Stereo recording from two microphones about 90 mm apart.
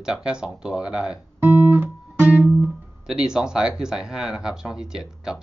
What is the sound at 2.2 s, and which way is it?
Music, 15° right (ahead or behind).